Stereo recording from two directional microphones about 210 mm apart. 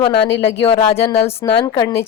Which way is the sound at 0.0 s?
25° left (ahead or behind).